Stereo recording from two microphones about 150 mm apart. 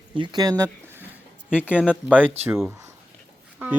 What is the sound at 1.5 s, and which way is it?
Speech, 10° left (ahead or behind).